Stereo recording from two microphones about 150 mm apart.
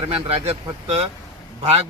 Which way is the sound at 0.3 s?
40° right (ahead or behind).